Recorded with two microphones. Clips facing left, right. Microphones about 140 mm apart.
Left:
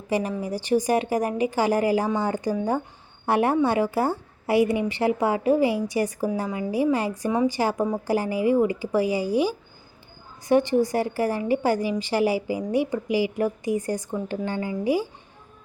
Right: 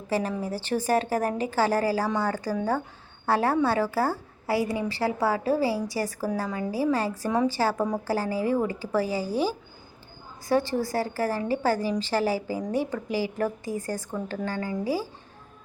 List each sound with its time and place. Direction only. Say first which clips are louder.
0.1 s a woman's voice: left 2 dB; 15° left (ahead or behind)